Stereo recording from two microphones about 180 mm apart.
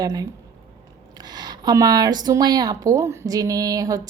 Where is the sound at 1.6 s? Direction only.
20° right (ahead or behind).